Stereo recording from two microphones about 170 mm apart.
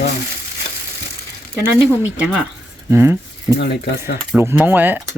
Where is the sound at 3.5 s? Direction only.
65° left (ahead or behind).